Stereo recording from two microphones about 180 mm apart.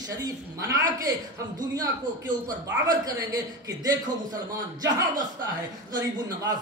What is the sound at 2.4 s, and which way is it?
Speech, 15° right (ahead or behind).